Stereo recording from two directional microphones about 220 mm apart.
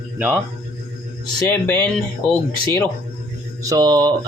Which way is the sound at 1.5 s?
10° left (ahead or behind).